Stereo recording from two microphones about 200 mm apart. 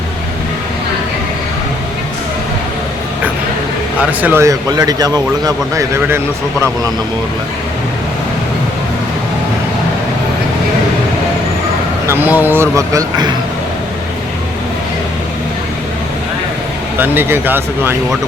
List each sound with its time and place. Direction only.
4.2 s speech: 10° right (ahead or behind)
12.0 s speech: 10° right (ahead or behind)
17.0 s speech: 10° right (ahead or behind)